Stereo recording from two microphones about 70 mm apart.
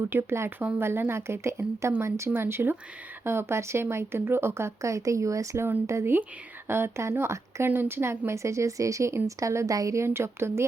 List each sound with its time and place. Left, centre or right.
0.1 s speech: right